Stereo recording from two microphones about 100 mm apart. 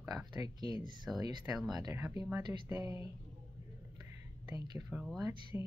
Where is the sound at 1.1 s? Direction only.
10° right (ahead or behind).